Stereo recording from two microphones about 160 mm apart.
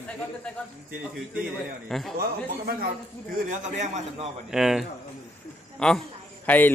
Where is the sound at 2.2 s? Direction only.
70° right (ahead or behind).